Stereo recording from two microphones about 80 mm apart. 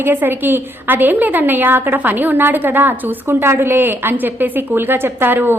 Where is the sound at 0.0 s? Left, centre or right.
Right.